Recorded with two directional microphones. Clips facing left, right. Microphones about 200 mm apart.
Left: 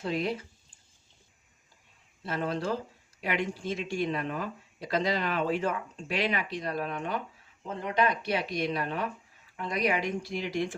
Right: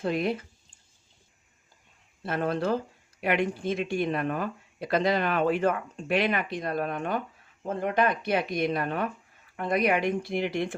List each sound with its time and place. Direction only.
0.0 s speech: 55° right (ahead or behind)
2.2 s speech: 55° right (ahead or behind)